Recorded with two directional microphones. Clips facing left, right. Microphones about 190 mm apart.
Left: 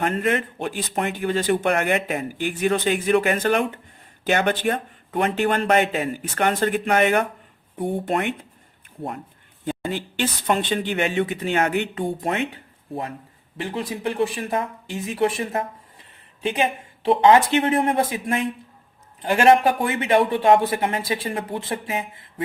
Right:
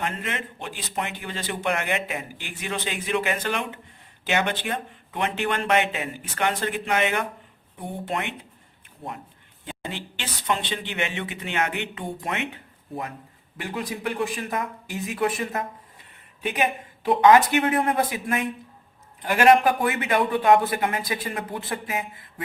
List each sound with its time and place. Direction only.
0.0 s speech: 50° left (ahead or behind)
9.6 s speech: 45° left (ahead or behind); by 22.3 s 25° left (ahead or behind)